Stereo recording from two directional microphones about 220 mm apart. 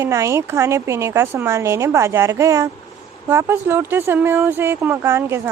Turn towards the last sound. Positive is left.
turn(degrees=-10)  # may be behind; listen again after turning